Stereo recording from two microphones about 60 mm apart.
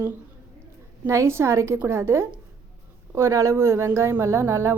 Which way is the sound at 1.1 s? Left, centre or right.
Right.